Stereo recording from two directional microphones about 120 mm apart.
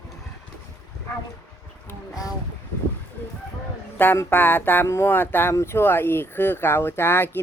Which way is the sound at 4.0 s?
15° left (ahead or behind).